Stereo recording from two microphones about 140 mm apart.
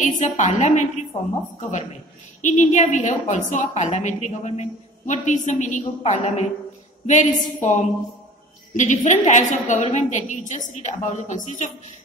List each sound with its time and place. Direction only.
0.0 s a woman's voice: 60° left (ahead or behind)